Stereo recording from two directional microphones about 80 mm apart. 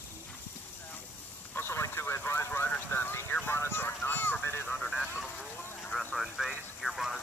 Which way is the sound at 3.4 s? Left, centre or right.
Left.